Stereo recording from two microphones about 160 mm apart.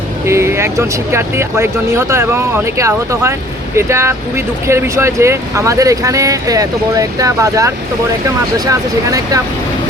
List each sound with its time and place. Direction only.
0.3 s speech: 15° right (ahead or behind)